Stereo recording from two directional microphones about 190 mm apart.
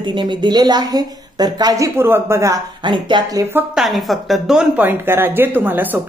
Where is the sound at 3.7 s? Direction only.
Centre (ahead or behind).